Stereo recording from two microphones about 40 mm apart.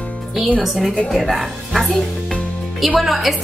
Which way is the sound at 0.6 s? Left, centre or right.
Centre.